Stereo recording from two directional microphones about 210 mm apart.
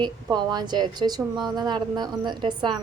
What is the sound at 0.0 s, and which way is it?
A woman's voice, 20° right (ahead or behind).